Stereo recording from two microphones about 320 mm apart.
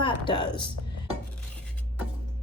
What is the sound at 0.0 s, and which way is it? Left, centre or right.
Speech, centre.